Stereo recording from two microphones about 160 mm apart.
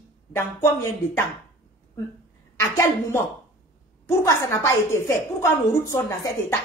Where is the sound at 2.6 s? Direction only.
15° left (ahead or behind).